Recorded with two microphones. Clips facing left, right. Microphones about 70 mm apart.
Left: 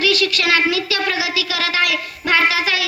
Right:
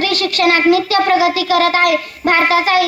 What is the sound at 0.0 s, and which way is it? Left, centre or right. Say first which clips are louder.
A child's voice: right 3 dB; right.